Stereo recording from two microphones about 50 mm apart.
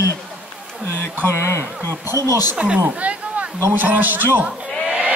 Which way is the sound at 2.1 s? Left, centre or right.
Right.